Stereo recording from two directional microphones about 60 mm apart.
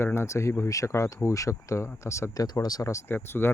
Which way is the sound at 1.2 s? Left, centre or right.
Left.